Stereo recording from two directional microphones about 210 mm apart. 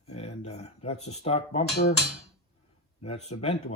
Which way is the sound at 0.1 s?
30° left (ahead or behind).